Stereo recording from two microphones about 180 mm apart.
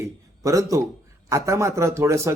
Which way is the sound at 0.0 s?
15° right (ahead or behind).